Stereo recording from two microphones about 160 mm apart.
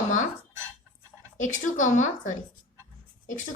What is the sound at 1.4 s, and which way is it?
A woman's voice, 50° left (ahead or behind).